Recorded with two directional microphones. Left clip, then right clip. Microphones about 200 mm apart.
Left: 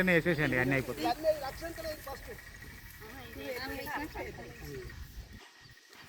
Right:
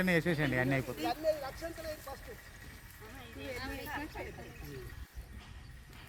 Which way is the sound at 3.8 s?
Centre (ahead or behind).